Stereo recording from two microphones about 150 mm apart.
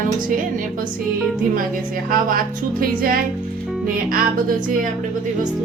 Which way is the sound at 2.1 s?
70° right (ahead or behind).